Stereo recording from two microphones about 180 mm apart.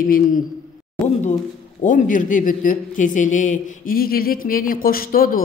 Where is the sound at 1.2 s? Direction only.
40° left (ahead or behind).